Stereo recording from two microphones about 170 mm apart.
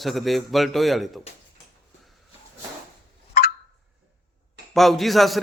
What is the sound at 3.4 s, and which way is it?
Clock, 60° left (ahead or behind).